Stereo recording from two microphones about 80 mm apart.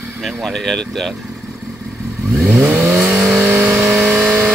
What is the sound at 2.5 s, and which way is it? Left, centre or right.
Vehicle, right.